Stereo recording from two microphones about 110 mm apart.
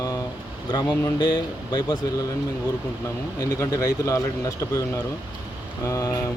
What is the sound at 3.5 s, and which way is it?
Speech, 35° left (ahead or behind).